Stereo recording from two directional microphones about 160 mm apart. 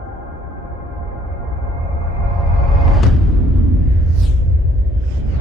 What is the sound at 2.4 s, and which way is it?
Music, centre (ahead or behind).